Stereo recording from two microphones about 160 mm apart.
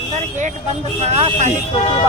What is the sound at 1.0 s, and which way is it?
Speech, 40° right (ahead or behind).